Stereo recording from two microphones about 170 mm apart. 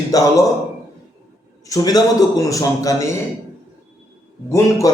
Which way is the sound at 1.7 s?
20° left (ahead or behind).